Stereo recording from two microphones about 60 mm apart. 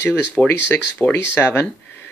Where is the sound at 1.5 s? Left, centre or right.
Left.